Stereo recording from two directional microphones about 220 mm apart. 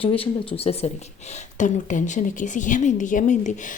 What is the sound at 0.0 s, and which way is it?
Speech, 25° left (ahead or behind).